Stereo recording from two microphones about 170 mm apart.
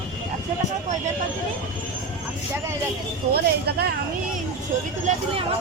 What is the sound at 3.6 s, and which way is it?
Speech, 70° right (ahead or behind).